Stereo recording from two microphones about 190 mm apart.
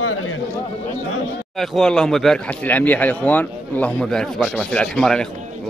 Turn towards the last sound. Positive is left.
turn(degrees=5)  # may be behind; listen again after turning